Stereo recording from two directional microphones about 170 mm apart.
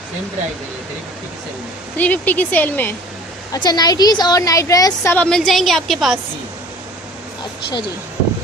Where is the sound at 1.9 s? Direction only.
10° left (ahead or behind).